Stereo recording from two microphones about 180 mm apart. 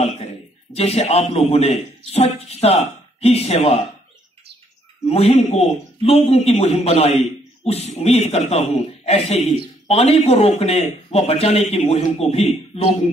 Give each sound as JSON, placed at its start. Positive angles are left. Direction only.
{"t": 0.7, "sound": "a man's voice", "side_deg": 35}
{"t": 5.0, "sound": "a man's voice", "side_deg": 35}